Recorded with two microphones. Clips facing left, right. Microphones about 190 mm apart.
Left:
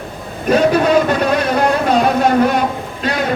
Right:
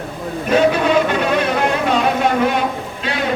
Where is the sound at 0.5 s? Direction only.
40° left (ahead or behind).